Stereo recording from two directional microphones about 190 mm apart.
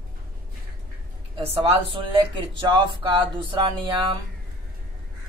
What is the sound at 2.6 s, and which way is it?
Speech, 25° right (ahead or behind).